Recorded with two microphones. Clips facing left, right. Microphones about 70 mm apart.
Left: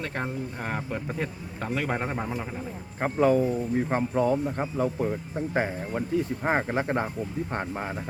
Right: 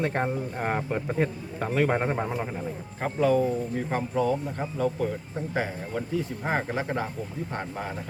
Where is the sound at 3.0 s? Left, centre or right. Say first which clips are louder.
Left 1 dB; left.